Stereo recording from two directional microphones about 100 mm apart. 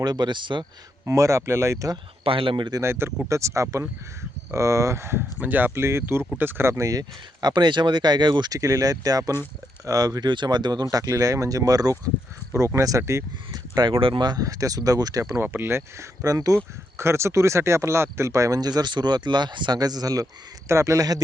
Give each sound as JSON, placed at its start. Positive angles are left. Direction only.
{"t": 0.0, "sound": "speech", "side_deg": -45}
{"t": 1.0, "sound": "speech", "side_deg": -30}
{"t": 2.2, "sound": "speech", "side_deg": -60}
{"t": 2.8, "sound": "speech", "side_deg": -25}
{"t": 7.4, "sound": "speech", "side_deg": -50}
{"t": 13.5, "sound": "speech", "side_deg": -40}
{"t": 15.4, "sound": "speech", "side_deg": -20}
{"t": 16.2, "sound": "speech", "side_deg": -35}